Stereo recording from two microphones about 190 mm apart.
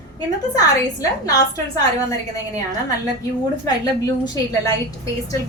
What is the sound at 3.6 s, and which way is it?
A woman's voice, 20° left (ahead or behind).